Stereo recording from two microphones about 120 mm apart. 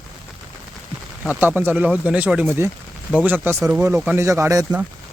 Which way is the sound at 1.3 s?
15° right (ahead or behind).